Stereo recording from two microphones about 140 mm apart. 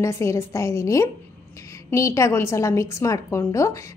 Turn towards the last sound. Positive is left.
turn(degrees=20)  # may be behind; listen again after turning